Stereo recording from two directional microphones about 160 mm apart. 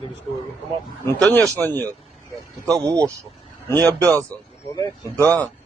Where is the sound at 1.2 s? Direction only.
5° left (ahead or behind).